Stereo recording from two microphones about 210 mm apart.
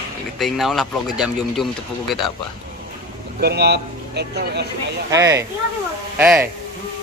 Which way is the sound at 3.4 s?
50° right (ahead or behind).